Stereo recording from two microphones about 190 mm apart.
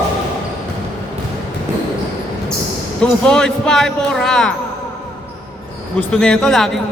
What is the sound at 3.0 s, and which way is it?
A woman's voice, 5° left (ahead or behind).